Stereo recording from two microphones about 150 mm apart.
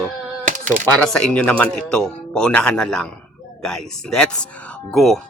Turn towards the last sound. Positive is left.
turn(degrees=0)  # may be behind; listen again after turning